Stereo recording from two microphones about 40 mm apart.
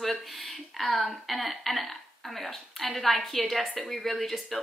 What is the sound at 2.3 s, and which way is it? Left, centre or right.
A woman's voice, centre.